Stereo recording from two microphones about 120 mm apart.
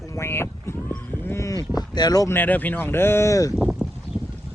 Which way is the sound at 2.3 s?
15° left (ahead or behind).